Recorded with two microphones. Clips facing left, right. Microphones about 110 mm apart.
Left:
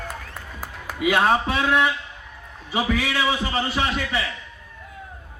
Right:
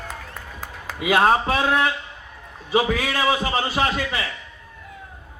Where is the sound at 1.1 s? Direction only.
40° right (ahead or behind).